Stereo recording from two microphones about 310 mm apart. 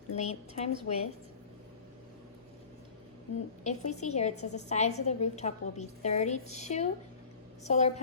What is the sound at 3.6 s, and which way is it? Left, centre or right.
A woman's voice, left.